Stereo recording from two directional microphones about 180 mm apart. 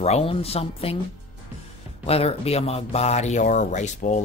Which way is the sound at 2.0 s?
35° left (ahead or behind).